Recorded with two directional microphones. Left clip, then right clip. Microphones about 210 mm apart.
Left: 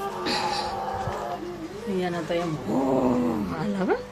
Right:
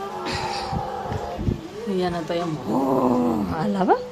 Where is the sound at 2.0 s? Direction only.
20° right (ahead or behind).